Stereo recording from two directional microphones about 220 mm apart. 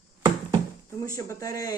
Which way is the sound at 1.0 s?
15° left (ahead or behind).